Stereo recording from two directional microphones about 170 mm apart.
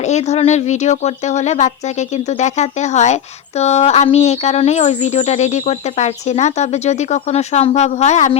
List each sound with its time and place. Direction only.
0.0 s speech: 40° left (ahead or behind)